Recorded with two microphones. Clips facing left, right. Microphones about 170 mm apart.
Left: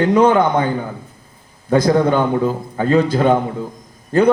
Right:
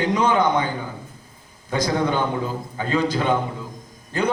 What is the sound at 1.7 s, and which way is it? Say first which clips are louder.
A man's voice: left 8 dB; 55° left (ahead or behind).